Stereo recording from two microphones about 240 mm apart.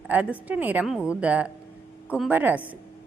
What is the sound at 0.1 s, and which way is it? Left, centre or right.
A woman's voice, centre.